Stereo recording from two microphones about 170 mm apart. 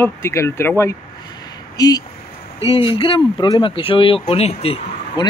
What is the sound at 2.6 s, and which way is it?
Speech, 30° left (ahead or behind).